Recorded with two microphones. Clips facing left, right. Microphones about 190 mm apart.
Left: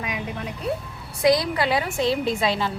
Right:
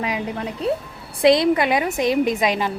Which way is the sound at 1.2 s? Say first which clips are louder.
Right 5 dB; 25° right (ahead or behind).